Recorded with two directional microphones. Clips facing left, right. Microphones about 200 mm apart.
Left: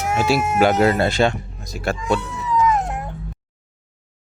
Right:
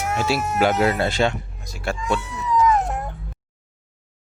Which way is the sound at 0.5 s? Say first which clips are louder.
Left 3 dB; 50° left (ahead or behind).